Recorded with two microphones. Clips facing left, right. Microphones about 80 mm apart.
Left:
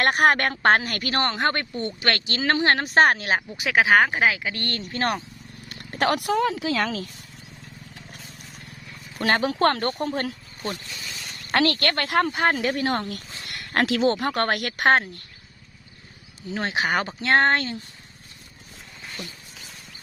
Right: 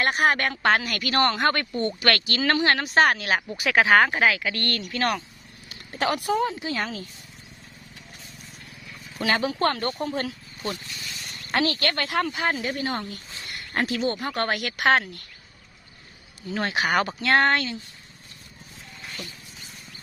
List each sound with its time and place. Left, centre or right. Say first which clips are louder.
0.0 s speech: left 3 dB; left
3.6 s speech: even; centre
4.8 s speech: left 2 dB; left
5.6 s speech: left 3 dB; left
9.2 s speech: left 3 dB; left
11.5 s a woman's voice: left 2 dB; left
13.4 s speech: left 3 dB; left
16.5 s speech: even; left